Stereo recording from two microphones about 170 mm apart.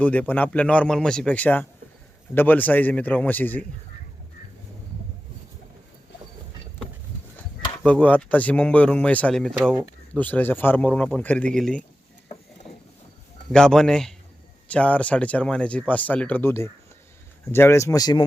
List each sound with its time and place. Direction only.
0.0 s speech: 10° left (ahead or behind)
7.9 s speech: 10° left (ahead or behind)
13.5 s a man's voice: 5° left (ahead or behind); by 18.3 s 25° left (ahead or behind)